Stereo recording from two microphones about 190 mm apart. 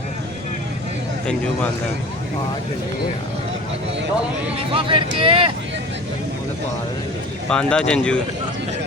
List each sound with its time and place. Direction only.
4.7 s speech: 30° right (ahead or behind)
7.5 s speech: 5° left (ahead or behind)